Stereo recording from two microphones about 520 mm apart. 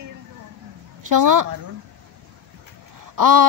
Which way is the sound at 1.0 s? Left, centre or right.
Right.